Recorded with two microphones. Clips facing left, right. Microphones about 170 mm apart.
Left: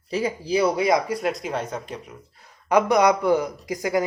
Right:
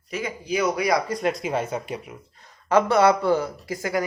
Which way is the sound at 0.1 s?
30° left (ahead or behind).